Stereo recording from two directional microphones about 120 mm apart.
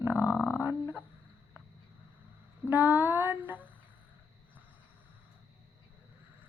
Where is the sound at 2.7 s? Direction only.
15° right (ahead or behind).